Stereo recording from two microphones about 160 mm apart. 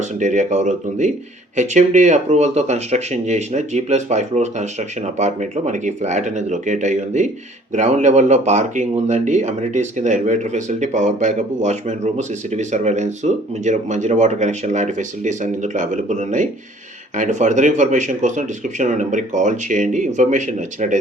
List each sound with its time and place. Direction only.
0.2 s speech: 50° right (ahead or behind)